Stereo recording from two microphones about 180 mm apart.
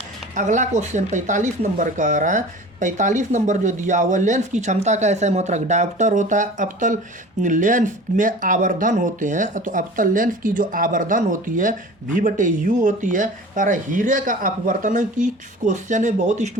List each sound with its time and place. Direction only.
0.3 s speech: 45° right (ahead or behind)